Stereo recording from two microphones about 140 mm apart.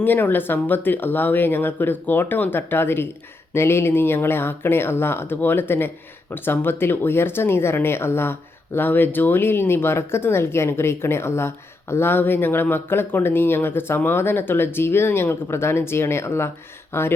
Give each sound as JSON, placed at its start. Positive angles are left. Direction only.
{"t": 0.0, "sound": "speech", "side_deg": 15}